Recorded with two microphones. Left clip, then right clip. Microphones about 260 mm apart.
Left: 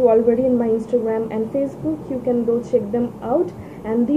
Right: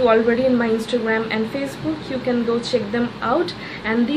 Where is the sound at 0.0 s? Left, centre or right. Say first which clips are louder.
Left 1 dB; right.